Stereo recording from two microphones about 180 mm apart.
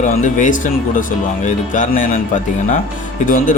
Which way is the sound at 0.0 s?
45° left (ahead or behind).